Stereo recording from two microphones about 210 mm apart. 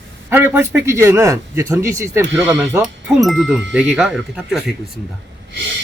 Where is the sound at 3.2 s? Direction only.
Centre (ahead or behind).